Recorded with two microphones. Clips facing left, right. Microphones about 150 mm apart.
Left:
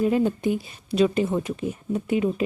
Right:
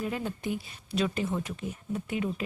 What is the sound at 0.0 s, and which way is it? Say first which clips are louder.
Speech: left 11 dB; 25° left (ahead or behind).